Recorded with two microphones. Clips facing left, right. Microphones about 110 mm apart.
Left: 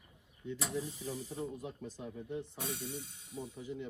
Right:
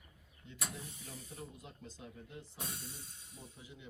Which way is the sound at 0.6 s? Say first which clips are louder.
Left 7 dB; 30° left (ahead or behind).